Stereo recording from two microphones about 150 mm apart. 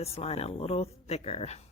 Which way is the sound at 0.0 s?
40° left (ahead or behind).